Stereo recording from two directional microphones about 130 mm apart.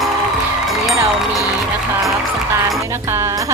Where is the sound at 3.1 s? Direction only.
20° right (ahead or behind).